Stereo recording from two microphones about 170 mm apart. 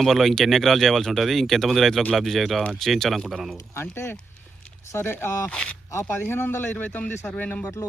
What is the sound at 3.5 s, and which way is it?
Speech, 15° left (ahead or behind).